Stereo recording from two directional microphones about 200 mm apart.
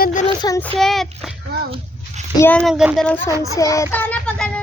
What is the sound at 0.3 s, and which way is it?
Speech, 20° left (ahead or behind).